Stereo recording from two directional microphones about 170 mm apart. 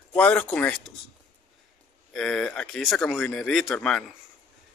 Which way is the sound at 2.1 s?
5° left (ahead or behind).